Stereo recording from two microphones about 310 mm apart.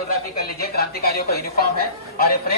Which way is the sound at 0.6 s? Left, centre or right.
Left.